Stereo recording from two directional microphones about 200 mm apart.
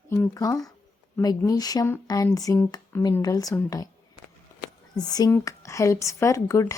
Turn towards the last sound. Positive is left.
turn(degrees=15)  # may be behind; listen again after turning